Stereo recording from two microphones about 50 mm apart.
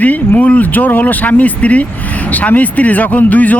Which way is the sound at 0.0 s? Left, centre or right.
Left.